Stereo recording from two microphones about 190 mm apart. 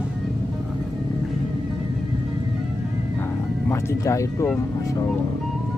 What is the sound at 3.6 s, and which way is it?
Speech, 15° left (ahead or behind).